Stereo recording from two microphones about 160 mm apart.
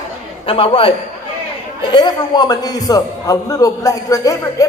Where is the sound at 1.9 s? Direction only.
25° left (ahead or behind).